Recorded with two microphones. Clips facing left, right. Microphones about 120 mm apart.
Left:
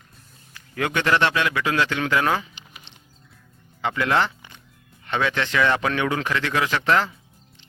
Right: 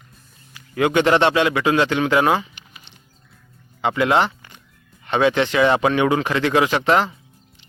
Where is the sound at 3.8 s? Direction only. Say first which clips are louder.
Right 4 dB; 20° right (ahead or behind).